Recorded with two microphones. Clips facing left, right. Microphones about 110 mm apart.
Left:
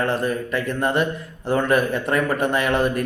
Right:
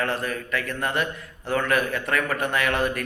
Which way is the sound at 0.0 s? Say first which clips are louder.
Left 5 dB; 25° left (ahead or behind).